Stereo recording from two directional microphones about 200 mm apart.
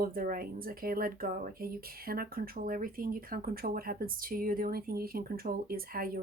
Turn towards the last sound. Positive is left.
turn(degrees=-45)  # may be behind; listen again after turning